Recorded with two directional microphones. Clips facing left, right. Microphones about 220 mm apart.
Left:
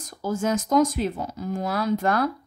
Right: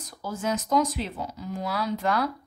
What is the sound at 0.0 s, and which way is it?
A woman's voice, 45° left (ahead or behind).